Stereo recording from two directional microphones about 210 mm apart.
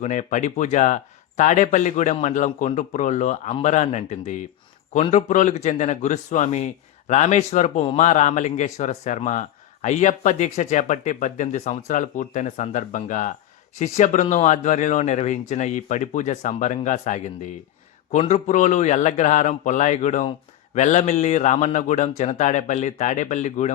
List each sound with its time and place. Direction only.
0.0 s a man's voice: 35° left (ahead or behind)